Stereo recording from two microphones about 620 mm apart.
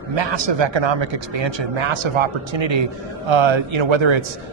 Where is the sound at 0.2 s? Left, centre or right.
Right.